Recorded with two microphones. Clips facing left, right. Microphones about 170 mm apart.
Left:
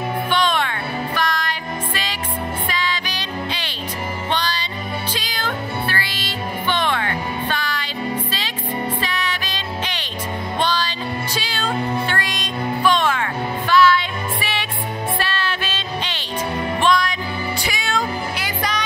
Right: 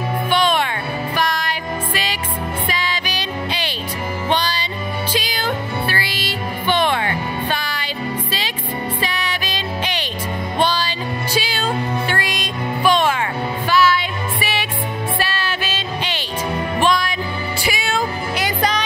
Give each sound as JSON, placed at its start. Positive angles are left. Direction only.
{"t": 0.3, "sound": "music", "side_deg": -10}
{"t": 2.7, "sound": "music", "side_deg": -10}
{"t": 9.0, "sound": "music", "side_deg": -10}
{"t": 18.4, "sound": "music", "side_deg": -30}